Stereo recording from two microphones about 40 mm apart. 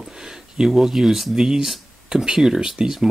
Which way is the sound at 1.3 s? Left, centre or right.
Centre.